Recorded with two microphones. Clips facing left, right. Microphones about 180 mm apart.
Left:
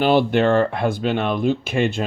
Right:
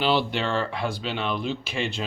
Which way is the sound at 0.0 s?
50° left (ahead or behind).